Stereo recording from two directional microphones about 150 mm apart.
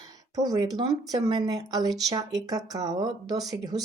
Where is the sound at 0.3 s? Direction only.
25° right (ahead or behind).